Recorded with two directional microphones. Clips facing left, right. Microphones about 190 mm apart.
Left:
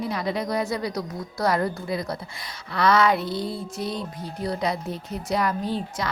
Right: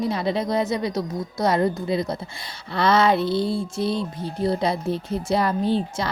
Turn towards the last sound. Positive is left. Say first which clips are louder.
# right 5 dB
turn(degrees=-30)  # may be behind; listen again after turning